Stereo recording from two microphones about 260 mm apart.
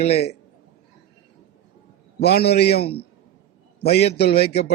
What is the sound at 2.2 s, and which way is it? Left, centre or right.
Speech, left.